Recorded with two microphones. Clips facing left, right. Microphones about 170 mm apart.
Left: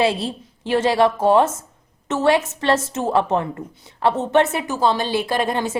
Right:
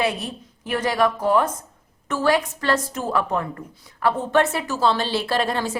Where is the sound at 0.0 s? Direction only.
30° left (ahead or behind).